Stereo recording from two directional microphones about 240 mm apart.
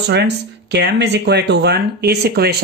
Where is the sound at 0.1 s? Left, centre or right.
Right.